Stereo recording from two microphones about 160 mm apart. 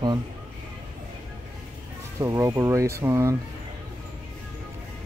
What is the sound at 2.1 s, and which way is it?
Speech, 20° right (ahead or behind).